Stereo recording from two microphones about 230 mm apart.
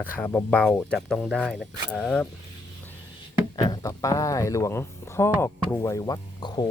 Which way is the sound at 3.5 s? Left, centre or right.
Centre.